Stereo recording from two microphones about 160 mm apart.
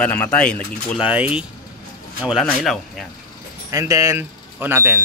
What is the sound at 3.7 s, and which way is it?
Speech, 20° right (ahead or behind).